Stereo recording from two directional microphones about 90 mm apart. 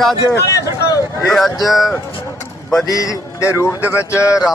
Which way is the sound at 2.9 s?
40° left (ahead or behind).